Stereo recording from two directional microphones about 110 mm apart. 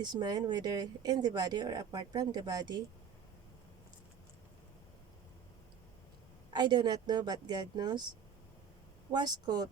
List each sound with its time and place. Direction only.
0.0 s speech: 40° right (ahead or behind)
6.5 s speech: 40° right (ahead or behind)
9.1 s speech: 40° right (ahead or behind)